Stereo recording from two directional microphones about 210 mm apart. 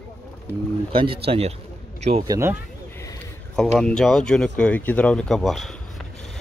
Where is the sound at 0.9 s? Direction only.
25° right (ahead or behind).